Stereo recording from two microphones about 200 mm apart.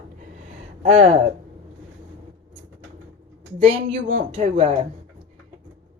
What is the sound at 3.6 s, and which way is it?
Speech, 30° right (ahead or behind).